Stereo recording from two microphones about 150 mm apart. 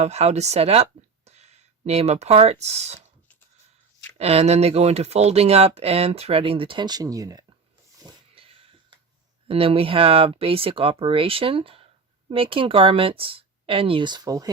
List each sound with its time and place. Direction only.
0.0 s speech: 50° right (ahead or behind)
4.2 s speech: 45° right (ahead or behind); by 7.4 s 25° right (ahead or behind)
8.4 s a sound: 40° right (ahead or behind)
9.5 s speech: 40° right (ahead or behind)